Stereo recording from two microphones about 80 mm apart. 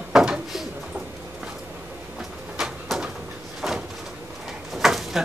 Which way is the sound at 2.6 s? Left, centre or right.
Centre.